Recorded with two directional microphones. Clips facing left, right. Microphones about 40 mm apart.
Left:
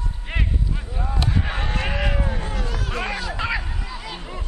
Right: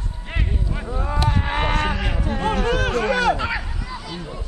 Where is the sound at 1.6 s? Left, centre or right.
Right.